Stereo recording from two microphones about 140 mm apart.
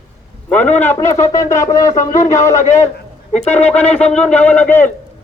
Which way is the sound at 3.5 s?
10° left (ahead or behind).